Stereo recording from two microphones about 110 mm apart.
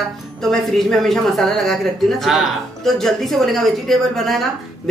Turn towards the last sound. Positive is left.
turn(degrees=0)  # may be behind; listen again after turning